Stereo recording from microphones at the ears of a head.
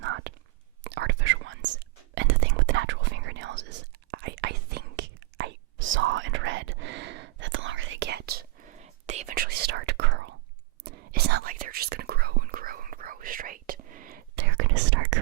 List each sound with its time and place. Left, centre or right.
0.0 s whispering: right